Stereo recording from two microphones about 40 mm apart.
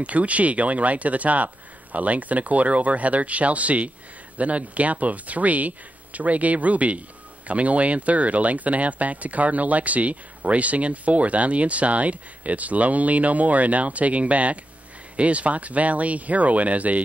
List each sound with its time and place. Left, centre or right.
0.0 s speech: right